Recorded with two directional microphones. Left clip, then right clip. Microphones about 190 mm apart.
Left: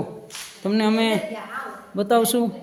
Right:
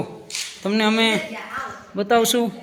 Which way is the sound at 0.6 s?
15° left (ahead or behind).